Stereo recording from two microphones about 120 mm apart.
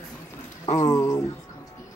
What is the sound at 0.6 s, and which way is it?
Speech, 55° left (ahead or behind).